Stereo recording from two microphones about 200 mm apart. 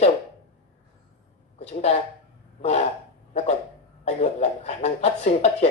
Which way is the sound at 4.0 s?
35° left (ahead or behind).